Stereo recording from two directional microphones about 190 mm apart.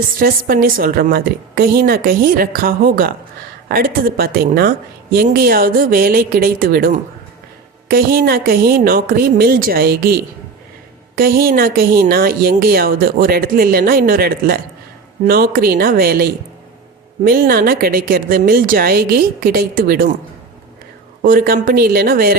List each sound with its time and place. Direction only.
0.2 s a woman's voice: 50° right (ahead or behind)
21.2 s a woman's voice: 50° right (ahead or behind)